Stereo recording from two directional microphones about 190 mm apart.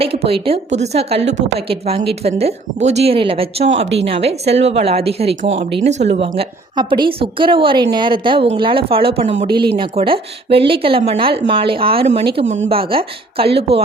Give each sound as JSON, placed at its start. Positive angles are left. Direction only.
{"t": 0.0, "sound": "a woman's voice", "side_deg": -30}